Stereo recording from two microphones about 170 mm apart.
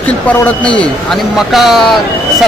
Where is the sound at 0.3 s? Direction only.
10° left (ahead or behind).